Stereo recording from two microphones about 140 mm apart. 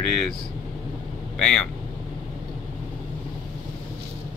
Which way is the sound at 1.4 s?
5° left (ahead or behind).